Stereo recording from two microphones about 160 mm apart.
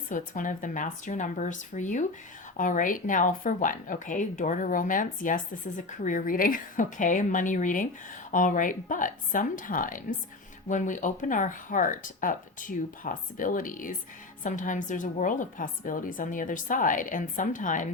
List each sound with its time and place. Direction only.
0.1 s a woman's voice: 55° left (ahead or behind)